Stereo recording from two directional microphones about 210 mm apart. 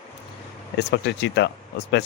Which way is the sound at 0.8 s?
55° left (ahead or behind).